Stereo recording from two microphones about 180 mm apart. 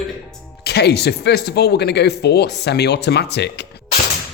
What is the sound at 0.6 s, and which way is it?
Speech, 65° left (ahead or behind).